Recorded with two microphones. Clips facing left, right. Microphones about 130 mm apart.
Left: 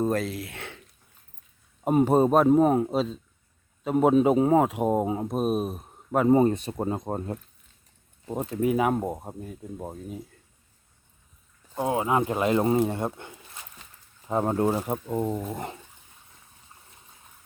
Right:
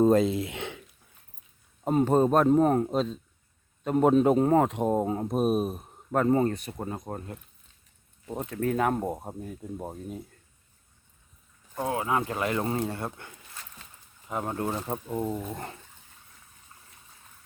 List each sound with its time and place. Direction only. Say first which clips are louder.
0.0 s speech: right 5 dB; 20° right (ahead or behind)
1.8 s speech: left 2 dB; 10° left (ahead or behind)
8.3 s speech: left 4 dB; 20° left (ahead or behind); by 10.2 s centre (ahead or behind)
11.7 s speech: left 3 dB; 20° left (ahead or behind)
12.9 s a sound: left 5 dB; 15° left (ahead or behind)
14.3 s speech: left 7 dB; 30° left (ahead or behind)
14.7 s speech: left 4 dB; 10° left (ahead or behind)
15.5 s speech: left 4 dB; 15° left (ahead or behind)